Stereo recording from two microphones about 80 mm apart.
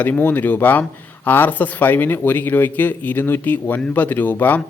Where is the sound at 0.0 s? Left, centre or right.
Left.